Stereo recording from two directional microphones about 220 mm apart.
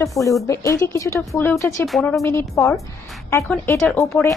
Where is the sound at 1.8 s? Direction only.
Centre (ahead or behind).